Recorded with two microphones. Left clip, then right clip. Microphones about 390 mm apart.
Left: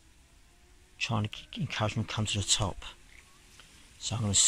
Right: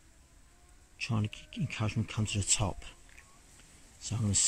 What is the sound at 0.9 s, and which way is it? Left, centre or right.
Speech, centre.